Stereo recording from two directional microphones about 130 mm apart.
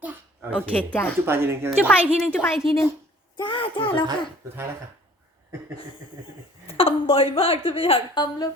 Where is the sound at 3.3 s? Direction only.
35° left (ahead or behind).